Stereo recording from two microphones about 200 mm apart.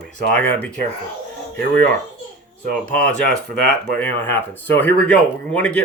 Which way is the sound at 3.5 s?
45° right (ahead or behind).